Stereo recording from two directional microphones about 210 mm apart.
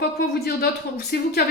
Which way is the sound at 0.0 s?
50° left (ahead or behind).